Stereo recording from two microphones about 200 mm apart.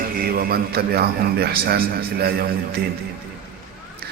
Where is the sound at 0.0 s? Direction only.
45° right (ahead or behind).